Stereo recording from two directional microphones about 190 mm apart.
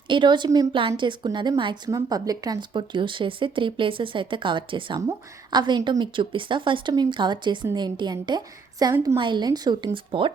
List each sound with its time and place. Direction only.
0.1 s a woman's voice: 25° right (ahead or behind)